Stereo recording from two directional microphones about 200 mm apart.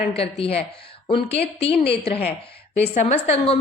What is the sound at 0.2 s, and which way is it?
A woman's voice, 30° left (ahead or behind).